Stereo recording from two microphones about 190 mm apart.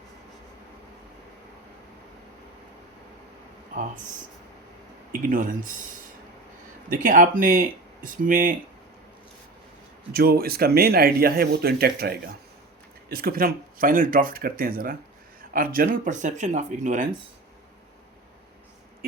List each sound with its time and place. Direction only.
5.3 s speech: 45° right (ahead or behind)
6.8 s speech: 45° right (ahead or behind)
10.1 s speech: 50° right (ahead or behind)